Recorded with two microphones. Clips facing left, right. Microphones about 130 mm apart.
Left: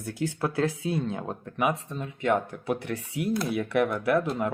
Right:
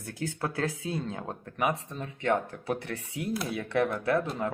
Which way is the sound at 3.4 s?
25° left (ahead or behind).